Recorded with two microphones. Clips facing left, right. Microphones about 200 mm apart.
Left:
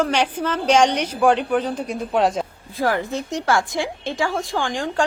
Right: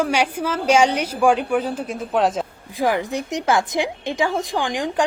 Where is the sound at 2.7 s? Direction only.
15° right (ahead or behind).